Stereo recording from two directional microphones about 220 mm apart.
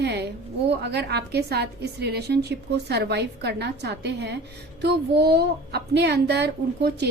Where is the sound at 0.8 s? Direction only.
50° right (ahead or behind).